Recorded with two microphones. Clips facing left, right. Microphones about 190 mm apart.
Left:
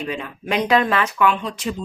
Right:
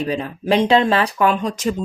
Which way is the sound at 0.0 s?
35° right (ahead or behind).